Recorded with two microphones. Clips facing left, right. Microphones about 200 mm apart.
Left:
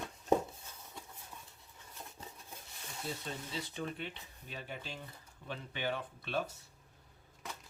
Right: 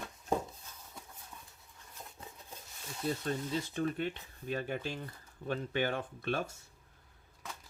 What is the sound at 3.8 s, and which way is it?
Speech, 50° right (ahead or behind).